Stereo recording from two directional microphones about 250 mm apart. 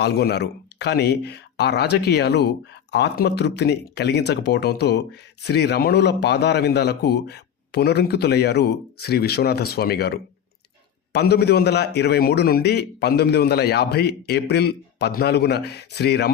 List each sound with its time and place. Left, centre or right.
0.0 s speech: left